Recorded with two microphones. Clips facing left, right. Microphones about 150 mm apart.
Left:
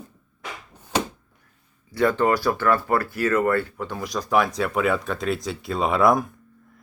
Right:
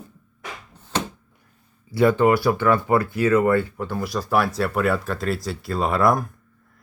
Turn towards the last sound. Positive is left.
turn(degrees=0)  # may be behind; listen again after turning